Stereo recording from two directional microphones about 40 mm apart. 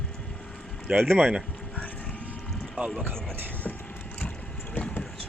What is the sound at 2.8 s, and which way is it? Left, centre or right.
Speech, right.